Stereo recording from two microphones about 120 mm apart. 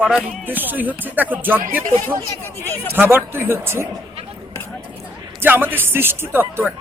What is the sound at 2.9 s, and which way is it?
Speech, 20° right (ahead or behind).